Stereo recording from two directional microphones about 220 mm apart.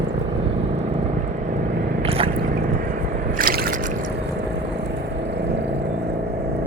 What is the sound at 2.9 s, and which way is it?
Drip, 40° right (ahead or behind).